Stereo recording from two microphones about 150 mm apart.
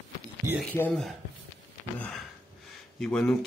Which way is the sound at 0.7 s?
10° left (ahead or behind).